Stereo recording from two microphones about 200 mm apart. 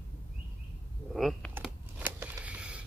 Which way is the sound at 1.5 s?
10° right (ahead or behind).